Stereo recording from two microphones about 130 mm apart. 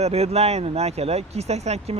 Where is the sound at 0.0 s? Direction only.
55° right (ahead or behind).